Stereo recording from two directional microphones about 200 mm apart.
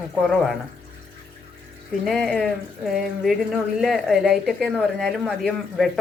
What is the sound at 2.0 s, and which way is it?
Speech, centre (ahead or behind).